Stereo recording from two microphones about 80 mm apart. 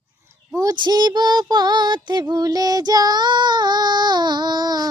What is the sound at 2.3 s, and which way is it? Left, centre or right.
Female singing, right.